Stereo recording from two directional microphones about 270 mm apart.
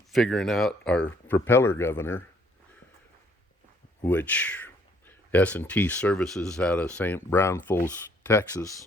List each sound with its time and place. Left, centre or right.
0.1 s speech: centre
4.0 s speech: centre